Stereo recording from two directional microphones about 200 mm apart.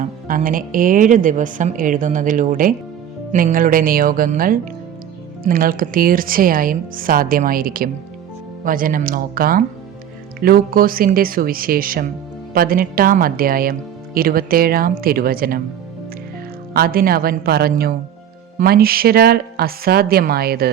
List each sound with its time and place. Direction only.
0.0 s a woman's voice: 45° right (ahead or behind)
16.7 s a woman's voice: 50° right (ahead or behind)